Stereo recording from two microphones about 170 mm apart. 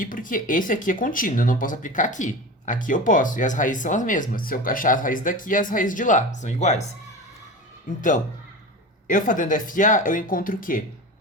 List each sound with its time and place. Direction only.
0.0 s speech: 55° left (ahead or behind)
9.0 s speech: 50° left (ahead or behind)